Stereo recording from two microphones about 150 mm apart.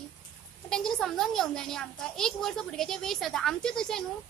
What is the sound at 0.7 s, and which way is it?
A woman's voice, 5° left (ahead or behind).